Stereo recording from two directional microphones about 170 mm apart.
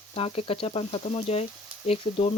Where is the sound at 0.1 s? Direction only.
35° left (ahead or behind).